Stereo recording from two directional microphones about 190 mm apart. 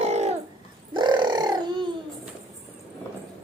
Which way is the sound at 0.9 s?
25° right (ahead or behind).